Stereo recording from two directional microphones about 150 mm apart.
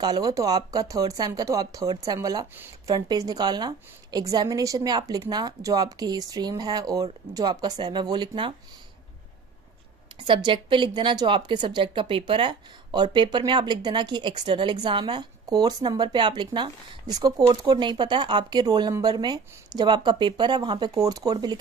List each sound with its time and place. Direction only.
0.0 s a woman's voice: 25° right (ahead or behind)
10.1 s speech: 30° right (ahead or behind)